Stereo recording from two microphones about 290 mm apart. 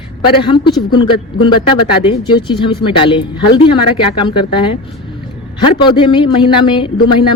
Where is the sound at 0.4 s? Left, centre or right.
Centre.